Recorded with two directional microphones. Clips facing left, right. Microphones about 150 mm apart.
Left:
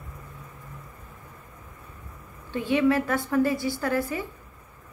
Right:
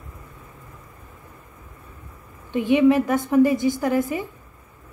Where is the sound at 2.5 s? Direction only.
15° right (ahead or behind).